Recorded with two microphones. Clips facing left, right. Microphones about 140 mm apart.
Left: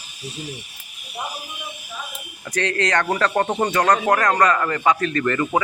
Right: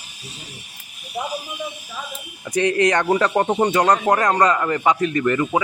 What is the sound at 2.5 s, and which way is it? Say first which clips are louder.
Speech: right 4 dB; 15° right (ahead or behind).